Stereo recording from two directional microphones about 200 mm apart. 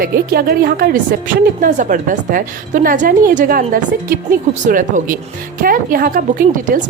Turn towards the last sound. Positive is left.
turn(degrees=-45)  # may be behind; listen again after turning